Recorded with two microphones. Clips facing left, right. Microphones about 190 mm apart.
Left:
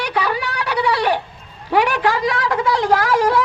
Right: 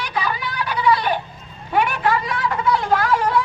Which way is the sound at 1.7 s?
90° left.